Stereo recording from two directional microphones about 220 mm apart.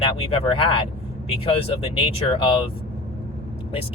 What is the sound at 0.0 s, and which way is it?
Speech, 25° left (ahead or behind).